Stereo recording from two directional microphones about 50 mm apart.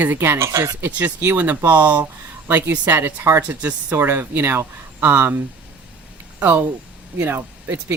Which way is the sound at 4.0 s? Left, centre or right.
Right.